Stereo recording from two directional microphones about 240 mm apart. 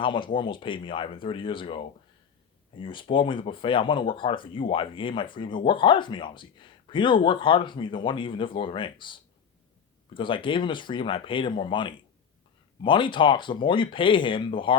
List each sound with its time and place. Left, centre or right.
0.0 s speech: left
10.2 s speech: left